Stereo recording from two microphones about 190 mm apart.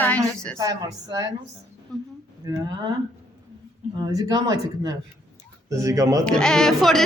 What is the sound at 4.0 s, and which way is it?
Speech, 20° right (ahead or behind).